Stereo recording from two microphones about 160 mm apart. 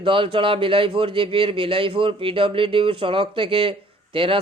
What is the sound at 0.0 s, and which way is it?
Speech, 30° right (ahead or behind).